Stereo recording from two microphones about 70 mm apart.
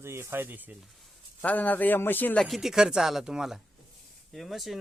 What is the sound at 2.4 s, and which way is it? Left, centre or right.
Speech, centre.